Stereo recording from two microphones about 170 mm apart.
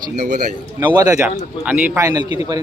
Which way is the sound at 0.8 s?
20° right (ahead or behind).